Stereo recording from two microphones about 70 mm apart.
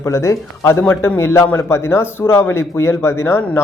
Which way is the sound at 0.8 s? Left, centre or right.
Left.